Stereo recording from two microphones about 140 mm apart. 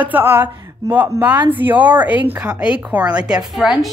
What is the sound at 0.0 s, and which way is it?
A woman's voice, 15° right (ahead or behind).